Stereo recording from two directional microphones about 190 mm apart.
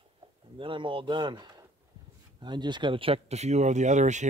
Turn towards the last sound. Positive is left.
turn(degrees=-40)  # may be behind; listen again after turning